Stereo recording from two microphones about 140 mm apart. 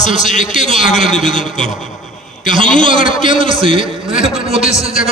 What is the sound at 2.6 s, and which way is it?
Speech, 65° left (ahead or behind).